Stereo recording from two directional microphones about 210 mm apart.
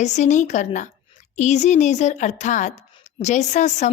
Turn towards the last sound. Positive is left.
turn(degrees=35)  # may be behind; listen again after turning